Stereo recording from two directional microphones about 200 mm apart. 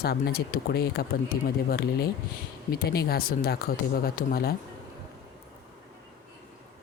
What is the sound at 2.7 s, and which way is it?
Speech, 50° left (ahead or behind).